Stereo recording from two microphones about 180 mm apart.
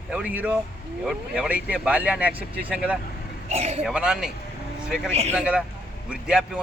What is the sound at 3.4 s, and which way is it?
Speech, 35° right (ahead or behind).